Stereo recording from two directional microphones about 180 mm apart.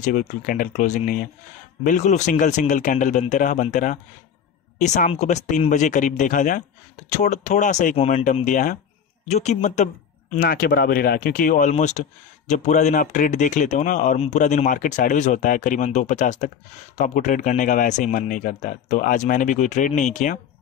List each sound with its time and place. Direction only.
0.0 s speech: 45° left (ahead or behind)
10.3 s speech: 50° left (ahead or behind)